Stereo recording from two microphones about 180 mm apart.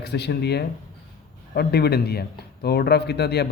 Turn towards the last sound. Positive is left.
turn(degrees=65)  # may be behind; listen again after turning